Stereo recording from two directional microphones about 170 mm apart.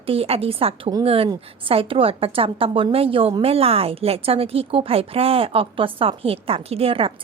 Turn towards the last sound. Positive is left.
turn(degrees=-35)  # may be behind; listen again after turning